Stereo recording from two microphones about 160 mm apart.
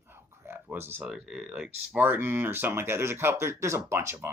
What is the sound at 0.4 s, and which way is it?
Speech, 10° right (ahead or behind).